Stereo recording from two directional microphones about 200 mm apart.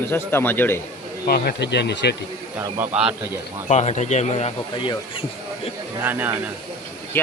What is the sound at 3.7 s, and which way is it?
Speech, 35° left (ahead or behind).